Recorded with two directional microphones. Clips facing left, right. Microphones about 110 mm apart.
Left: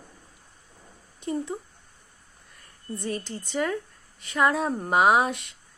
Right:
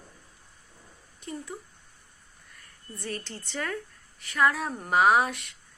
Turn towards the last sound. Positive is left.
turn(degrees=20)  # may be behind; listen again after turning